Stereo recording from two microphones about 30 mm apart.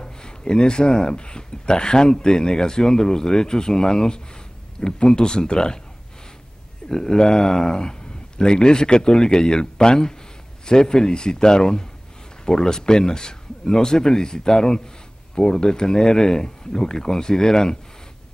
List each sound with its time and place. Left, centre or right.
0.0 s speech: left
6.9 s speech: left